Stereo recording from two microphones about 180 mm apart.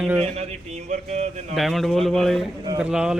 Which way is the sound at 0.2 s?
35° right (ahead or behind).